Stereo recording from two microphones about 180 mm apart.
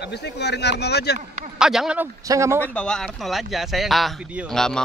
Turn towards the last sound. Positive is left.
turn(degrees=5)  # may be behind; listen again after turning